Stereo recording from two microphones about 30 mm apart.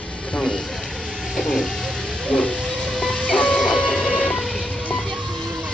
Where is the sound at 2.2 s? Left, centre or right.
Left.